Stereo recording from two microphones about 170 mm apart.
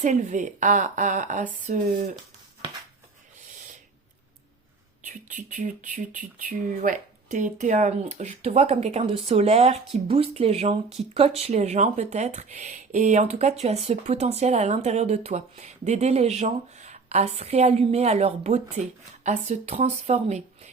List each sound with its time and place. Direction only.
0.0 s speech: 45° right (ahead or behind)
5.3 s speech: 50° right (ahead or behind)